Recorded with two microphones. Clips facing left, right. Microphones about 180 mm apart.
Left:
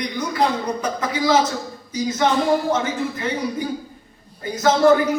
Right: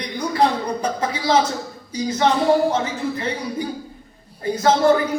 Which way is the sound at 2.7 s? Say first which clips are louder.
Even; 30° right (ahead or behind).